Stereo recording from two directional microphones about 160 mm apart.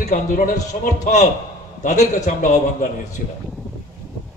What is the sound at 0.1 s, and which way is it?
A man's voice, 55° left (ahead or behind).